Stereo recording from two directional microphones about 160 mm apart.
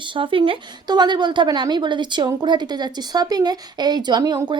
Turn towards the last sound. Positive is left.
turn(degrees=-25)  # may be behind; listen again after turning